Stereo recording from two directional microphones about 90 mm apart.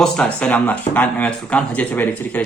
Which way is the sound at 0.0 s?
10° left (ahead or behind).